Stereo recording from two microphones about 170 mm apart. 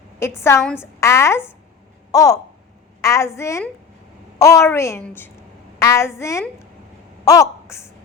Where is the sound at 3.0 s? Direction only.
15° left (ahead or behind).